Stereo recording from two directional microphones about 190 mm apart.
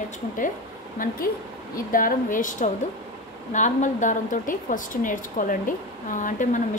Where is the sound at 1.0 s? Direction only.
45° left (ahead or behind).